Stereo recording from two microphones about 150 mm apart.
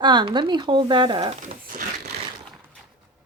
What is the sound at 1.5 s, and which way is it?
Speech, 65° right (ahead or behind).